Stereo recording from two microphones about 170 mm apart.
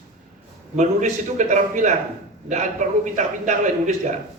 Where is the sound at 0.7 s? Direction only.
45° right (ahead or behind).